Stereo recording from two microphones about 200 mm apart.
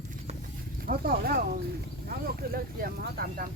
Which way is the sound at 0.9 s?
50° right (ahead or behind).